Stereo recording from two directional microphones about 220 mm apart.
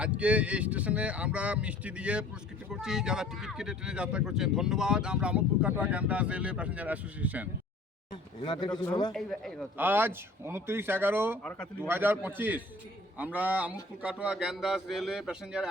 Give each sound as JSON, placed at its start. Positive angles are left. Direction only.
{"t": 0.0, "sound": "speech", "side_deg": -5}
{"t": 8.1, "sound": "speech", "side_deg": 20}
{"t": 9.1, "sound": "speech", "side_deg": 0}
{"t": 9.7, "sound": "speech", "side_deg": -10}
{"t": 11.4, "sound": "speech", "side_deg": 5}
{"t": 11.9, "sound": "speech", "side_deg": -10}